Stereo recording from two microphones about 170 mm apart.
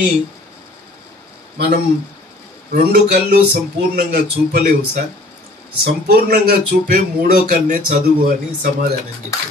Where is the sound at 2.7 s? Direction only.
60° right (ahead or behind).